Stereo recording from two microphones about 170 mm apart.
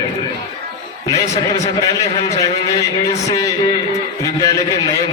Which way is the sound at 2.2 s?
20° left (ahead or behind).